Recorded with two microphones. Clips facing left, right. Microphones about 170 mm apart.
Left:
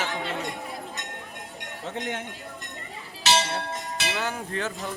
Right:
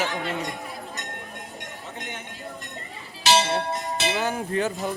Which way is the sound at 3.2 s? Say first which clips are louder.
Right 4 dB; 15° right (ahead or behind).